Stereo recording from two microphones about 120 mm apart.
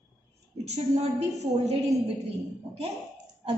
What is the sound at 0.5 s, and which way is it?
A woman's voice, 65° right (ahead or behind).